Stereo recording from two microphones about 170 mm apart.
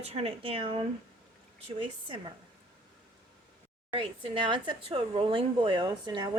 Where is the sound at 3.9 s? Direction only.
30° right (ahead or behind).